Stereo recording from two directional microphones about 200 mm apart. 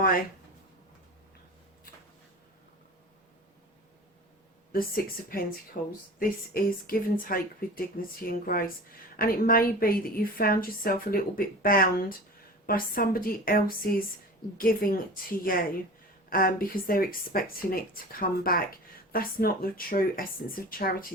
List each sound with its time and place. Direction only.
4.7 s a woman's voice: 45° left (ahead or behind)